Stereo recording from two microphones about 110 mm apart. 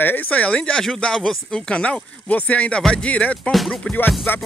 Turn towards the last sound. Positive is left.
turn(degrees=15)  # may be behind; listen again after turning